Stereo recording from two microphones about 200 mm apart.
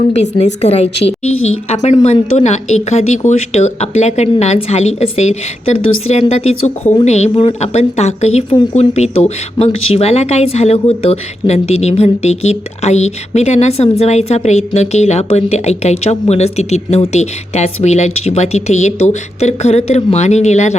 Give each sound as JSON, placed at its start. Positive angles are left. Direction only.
{"t": 0.1, "sound": "speech", "side_deg": 35}
{"t": 1.3, "sound": "a woman's voice", "side_deg": 90}
{"t": 1.7, "sound": "speech", "side_deg": 35}